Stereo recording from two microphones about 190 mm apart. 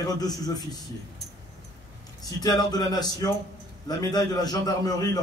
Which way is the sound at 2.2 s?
20° left (ahead or behind).